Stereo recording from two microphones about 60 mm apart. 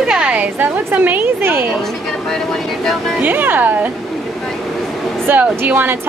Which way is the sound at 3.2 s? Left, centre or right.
Right.